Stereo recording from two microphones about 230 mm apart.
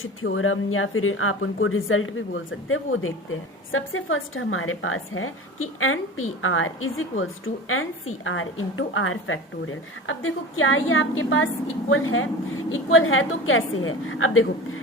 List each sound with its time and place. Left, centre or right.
0.0 s a woman's voice: left